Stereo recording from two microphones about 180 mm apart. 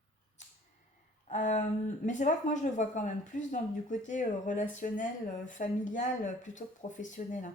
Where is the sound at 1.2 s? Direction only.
45° left (ahead or behind).